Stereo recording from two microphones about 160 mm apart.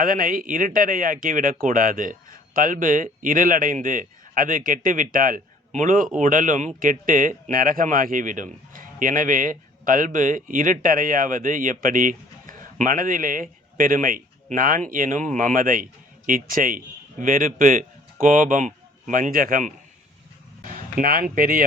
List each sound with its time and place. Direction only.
0.0 s a man's voice: 60° right (ahead or behind)
21.0 s a man's voice: 65° right (ahead or behind)